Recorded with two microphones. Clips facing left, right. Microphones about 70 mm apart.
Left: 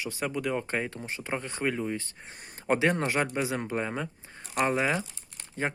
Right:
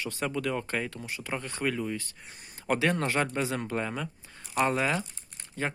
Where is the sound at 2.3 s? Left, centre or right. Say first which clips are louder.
Left 3 dB; left.